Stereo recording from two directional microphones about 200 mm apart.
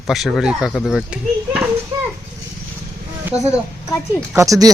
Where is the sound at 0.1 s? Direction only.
Centre (ahead or behind).